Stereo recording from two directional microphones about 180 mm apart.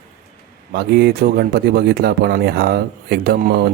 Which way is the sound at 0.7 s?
60° right (ahead or behind).